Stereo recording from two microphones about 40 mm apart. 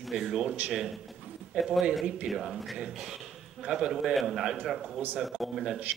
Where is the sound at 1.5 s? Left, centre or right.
Centre.